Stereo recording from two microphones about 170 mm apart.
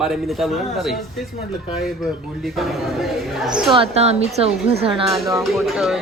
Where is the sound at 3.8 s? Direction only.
35° right (ahead or behind).